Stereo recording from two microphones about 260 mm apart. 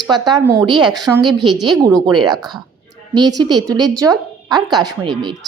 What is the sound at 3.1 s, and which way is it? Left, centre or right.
A woman's voice, centre.